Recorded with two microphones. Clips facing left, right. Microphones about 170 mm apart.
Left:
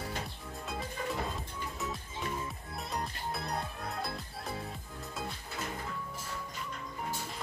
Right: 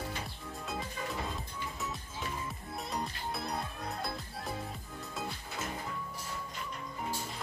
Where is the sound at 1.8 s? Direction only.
Centre (ahead or behind).